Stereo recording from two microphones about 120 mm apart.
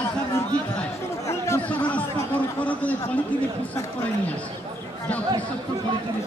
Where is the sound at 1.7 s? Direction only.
10° left (ahead or behind).